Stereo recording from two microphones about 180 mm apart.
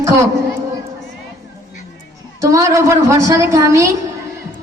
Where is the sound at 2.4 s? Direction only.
15° right (ahead or behind).